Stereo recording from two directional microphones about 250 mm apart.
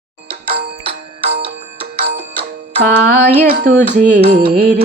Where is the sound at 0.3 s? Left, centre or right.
Right.